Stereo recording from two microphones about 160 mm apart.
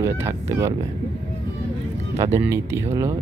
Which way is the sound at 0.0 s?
15° right (ahead or behind).